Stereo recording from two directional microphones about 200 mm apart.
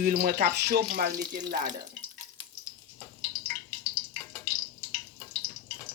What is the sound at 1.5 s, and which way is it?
Speech, 40° right (ahead or behind).